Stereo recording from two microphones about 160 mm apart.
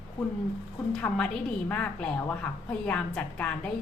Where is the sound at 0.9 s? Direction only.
5° left (ahead or behind).